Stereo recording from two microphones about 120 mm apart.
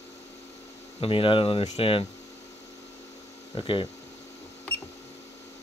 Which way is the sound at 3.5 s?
45° left (ahead or behind).